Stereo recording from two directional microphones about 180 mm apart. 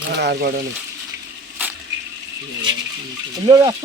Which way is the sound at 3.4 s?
25° right (ahead or behind).